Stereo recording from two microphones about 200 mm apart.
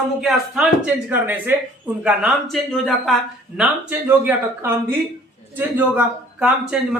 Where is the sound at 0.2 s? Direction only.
Centre (ahead or behind).